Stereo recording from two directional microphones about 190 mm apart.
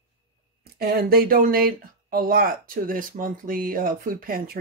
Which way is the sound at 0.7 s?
55° right (ahead or behind).